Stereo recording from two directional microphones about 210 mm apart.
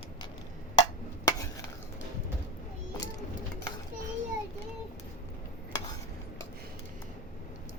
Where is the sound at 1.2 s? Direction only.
15° left (ahead or behind).